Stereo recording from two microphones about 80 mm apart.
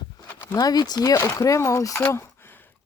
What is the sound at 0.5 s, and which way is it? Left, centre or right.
Speech, left.